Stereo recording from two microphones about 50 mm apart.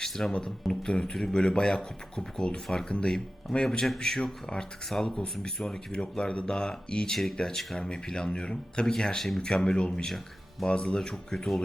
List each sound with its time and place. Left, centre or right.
0.0 s speech: centre